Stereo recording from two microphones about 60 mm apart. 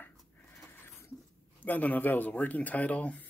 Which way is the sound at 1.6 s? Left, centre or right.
Left.